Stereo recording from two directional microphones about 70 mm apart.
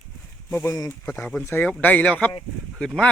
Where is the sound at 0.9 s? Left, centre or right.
Left.